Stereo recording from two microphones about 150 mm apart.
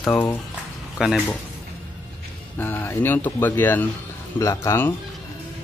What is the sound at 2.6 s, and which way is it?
Speech, 15° left (ahead or behind).